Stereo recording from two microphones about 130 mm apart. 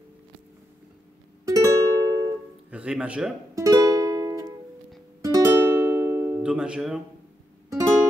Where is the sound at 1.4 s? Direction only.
25° right (ahead or behind).